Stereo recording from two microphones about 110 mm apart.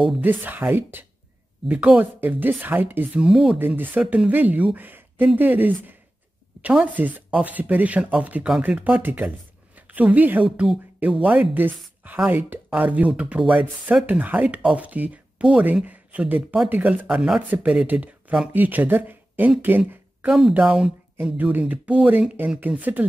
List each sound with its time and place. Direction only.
0.2 s speech: 15° right (ahead or behind)
3.3 s speech: 5° right (ahead or behind)
3.5 s speech: 15° right (ahead or behind)
4.0 s speech: 5° right (ahead or behind)
17.1 s speech: 5° right (ahead or behind)
20.2 s speech: 5° right (ahead or behind)